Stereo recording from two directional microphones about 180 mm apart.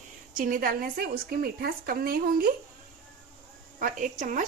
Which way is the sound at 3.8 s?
45° right (ahead or behind).